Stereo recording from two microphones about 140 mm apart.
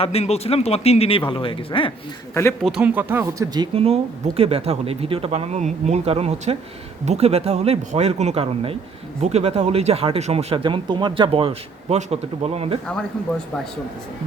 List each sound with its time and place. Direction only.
0.0 s speech: 45° left (ahead or behind)
2.3 s speech: 15° left (ahead or behind)
2.6 s speech: 10° right (ahead or behind); by 3.7 s 25° right (ahead or behind)
3.8 s speech: 45° right (ahead or behind)
10.5 s a man's voice: 35° right (ahead or behind)
11.9 s speech: 55° right (ahead or behind)
12.9 s speech: 5° left (ahead or behind)